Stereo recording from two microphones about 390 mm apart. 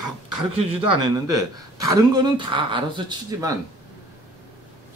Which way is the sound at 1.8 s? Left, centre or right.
Centre.